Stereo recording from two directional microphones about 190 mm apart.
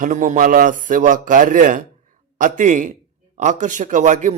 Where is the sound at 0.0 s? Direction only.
40° right (ahead or behind).